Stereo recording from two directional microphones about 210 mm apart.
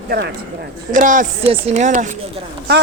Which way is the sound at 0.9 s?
40° right (ahead or behind).